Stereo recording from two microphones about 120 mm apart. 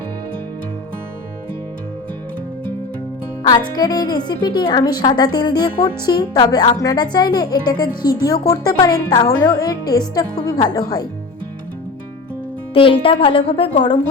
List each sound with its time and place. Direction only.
3.4 s a woman's voice: 35° left (ahead or behind)
12.7 s a woman's voice: 45° left (ahead or behind)